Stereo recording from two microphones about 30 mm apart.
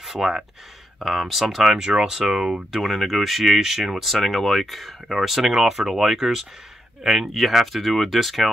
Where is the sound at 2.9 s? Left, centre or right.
Centre.